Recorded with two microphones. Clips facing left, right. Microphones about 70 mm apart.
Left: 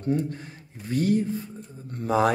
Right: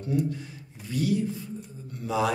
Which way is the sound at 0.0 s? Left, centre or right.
Left.